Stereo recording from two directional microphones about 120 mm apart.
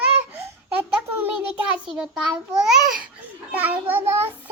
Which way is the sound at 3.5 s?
15° right (ahead or behind).